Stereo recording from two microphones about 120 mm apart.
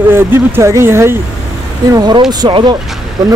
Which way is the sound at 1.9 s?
35° right (ahead or behind).